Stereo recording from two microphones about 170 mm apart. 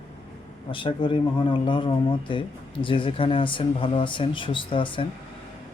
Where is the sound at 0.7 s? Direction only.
30° left (ahead or behind).